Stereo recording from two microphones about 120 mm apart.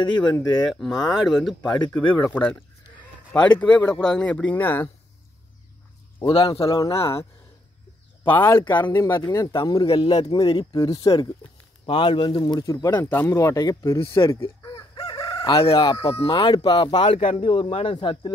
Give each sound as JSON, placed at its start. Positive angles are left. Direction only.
{"t": 0.0, "sound": "speech", "side_deg": 40}
{"t": 0.7, "sound": "speech", "side_deg": 0}
{"t": 6.2, "sound": "speech", "side_deg": 40}
{"t": 8.3, "sound": "speech", "side_deg": 20}
{"t": 9.8, "sound": "speech", "side_deg": 45}
{"t": 11.8, "sound": "speech", "side_deg": 45}
{"t": 13.0, "sound": "speech", "side_deg": 20}
{"t": 13.9, "sound": "speech", "side_deg": 45}
{"t": 14.6, "sound": "chicken", "side_deg": 35}
{"t": 15.7, "sound": "speech", "side_deg": 35}